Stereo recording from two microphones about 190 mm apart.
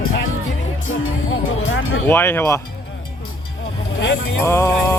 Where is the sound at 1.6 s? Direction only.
90° left.